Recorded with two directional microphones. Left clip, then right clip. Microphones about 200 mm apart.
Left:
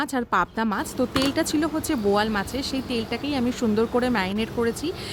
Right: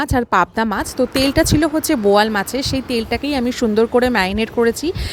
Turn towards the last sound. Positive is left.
turn(degrees=-35)  # may be behind; listen again after turning